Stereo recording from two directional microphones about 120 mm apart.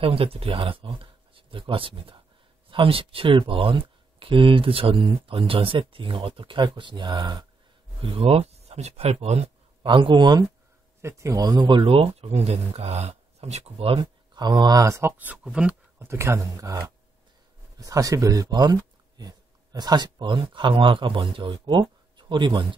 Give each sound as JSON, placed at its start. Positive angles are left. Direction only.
{"t": 0.0, "sound": "speech", "side_deg": -50}
{"t": 8.0, "sound": "speech", "side_deg": -50}
{"t": 9.8, "sound": "speech", "side_deg": -45}
{"t": 11.0, "sound": "speech", "side_deg": -25}
{"t": 14.3, "sound": "speech", "side_deg": -35}
{"t": 16.0, "sound": "speech", "side_deg": -20}